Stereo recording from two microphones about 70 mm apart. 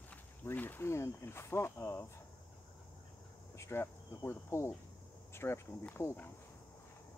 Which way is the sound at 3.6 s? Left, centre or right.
Left.